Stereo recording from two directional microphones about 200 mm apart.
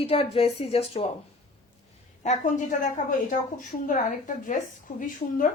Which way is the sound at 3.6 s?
40° left (ahead or behind).